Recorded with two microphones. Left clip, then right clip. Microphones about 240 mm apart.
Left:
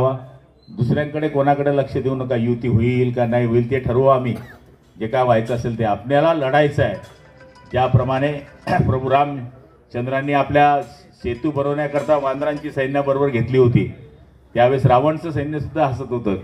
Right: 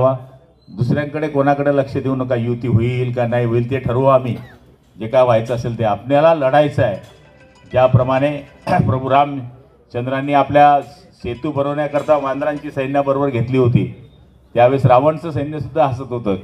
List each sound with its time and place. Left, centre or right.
0.7 s a man's voice: right